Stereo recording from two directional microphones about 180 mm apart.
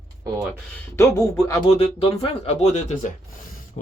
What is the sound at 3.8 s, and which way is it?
Hiss, 40° left (ahead or behind).